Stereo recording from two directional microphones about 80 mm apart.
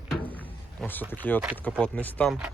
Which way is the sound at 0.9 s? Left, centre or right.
Left.